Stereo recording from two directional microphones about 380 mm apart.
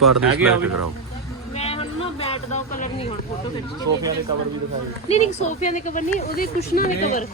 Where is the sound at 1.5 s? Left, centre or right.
Centre.